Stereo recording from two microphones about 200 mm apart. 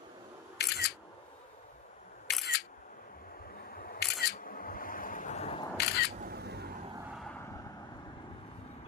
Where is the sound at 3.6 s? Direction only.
45° left (ahead or behind).